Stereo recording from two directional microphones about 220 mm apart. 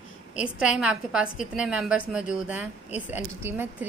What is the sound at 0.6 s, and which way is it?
A woman's voice, 5° right (ahead or behind).